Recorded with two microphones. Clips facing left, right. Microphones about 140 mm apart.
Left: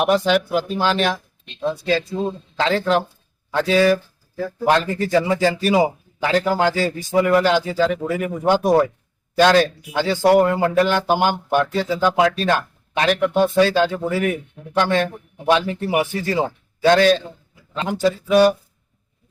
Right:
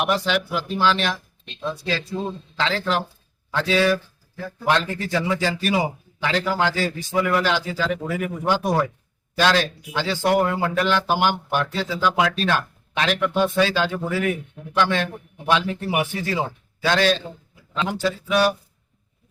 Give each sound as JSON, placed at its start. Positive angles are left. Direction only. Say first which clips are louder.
{"t": 0.0, "sound": "speech", "louder": "left 5 dB", "side_deg": 40}
{"t": 2.6, "sound": "speech", "louder": "left 5 dB", "side_deg": 45}
{"t": 8.4, "sound": "speech", "louder": "left 6 dB", "side_deg": 45}